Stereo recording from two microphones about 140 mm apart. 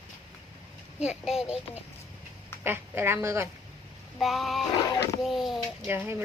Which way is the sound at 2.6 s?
15° right (ahead or behind).